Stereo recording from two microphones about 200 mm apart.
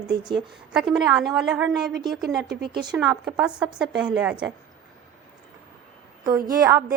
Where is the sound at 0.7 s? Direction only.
5° right (ahead or behind).